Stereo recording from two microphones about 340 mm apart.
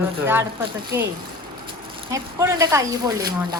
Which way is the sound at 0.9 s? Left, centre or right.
Centre.